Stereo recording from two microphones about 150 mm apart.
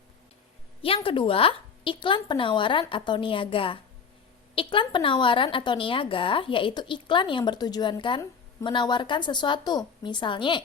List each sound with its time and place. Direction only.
0.8 s a woman's voice: 40° left (ahead or behind)